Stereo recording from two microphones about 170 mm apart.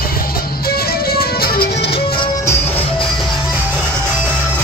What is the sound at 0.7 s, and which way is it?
Music, 65° left (ahead or behind).